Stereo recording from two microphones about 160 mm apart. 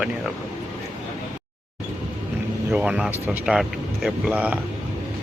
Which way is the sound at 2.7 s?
5° right (ahead or behind).